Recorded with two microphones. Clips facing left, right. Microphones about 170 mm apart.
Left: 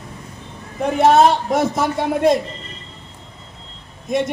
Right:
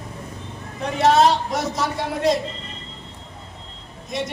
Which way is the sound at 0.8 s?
55° left (ahead or behind).